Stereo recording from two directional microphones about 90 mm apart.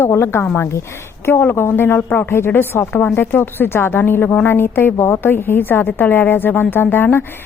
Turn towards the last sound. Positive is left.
turn(degrees=25)  # may be behind; listen again after turning